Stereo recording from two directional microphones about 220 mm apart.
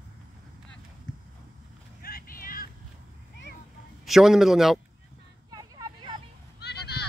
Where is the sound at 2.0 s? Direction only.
40° left (ahead or behind).